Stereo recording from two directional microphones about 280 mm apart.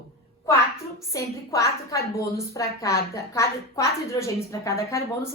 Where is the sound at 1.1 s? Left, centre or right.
Centre.